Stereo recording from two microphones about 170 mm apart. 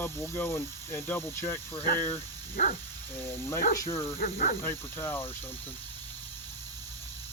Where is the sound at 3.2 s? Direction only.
15° left (ahead or behind).